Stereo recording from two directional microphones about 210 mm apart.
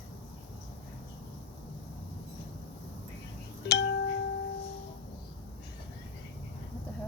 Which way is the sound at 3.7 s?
55° left (ahead or behind).